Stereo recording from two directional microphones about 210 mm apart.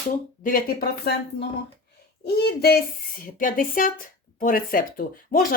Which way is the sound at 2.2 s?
50° left (ahead or behind).